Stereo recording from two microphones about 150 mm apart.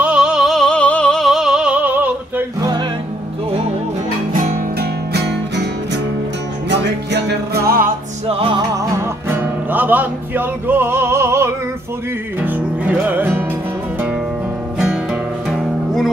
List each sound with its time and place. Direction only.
0.0 s music: 5° right (ahead or behind)
4.3 s music: 60° right (ahead or behind); by 5.4 s 90° right
7.2 s music: 90° right
8.3 s music: 35° right (ahead or behind)
8.7 s music: 20° right (ahead or behind)
15.5 s music: centre (ahead or behind)